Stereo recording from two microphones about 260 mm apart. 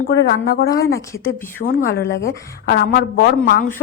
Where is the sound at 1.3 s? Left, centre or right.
Centre.